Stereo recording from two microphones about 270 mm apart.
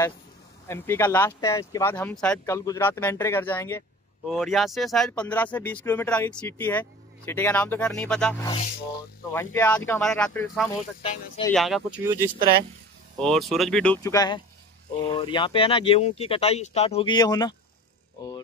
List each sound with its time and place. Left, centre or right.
0.7 s speech: centre
11.0 s speech: centre
11.5 s speech: centre